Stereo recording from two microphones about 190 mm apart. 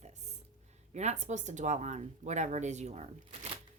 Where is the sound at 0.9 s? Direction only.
35° right (ahead or behind).